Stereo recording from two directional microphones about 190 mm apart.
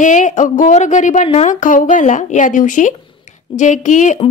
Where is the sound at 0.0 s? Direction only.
40° left (ahead or behind).